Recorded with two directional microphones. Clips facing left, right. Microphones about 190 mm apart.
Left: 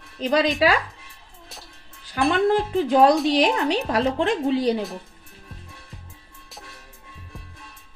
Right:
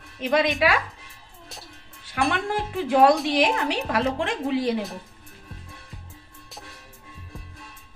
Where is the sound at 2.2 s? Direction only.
35° left (ahead or behind).